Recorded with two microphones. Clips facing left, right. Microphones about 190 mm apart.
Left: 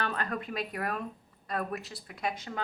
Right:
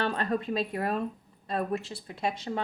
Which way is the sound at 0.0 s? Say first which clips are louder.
Right 5 dB; 25° right (ahead or behind).